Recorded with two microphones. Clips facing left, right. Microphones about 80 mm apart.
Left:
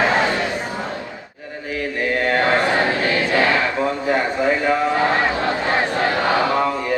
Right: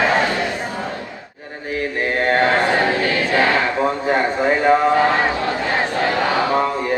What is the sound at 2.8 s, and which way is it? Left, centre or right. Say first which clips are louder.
Choir: right 1 dB; left.